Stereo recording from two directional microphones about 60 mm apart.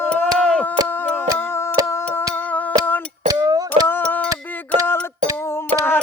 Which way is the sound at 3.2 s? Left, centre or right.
Right.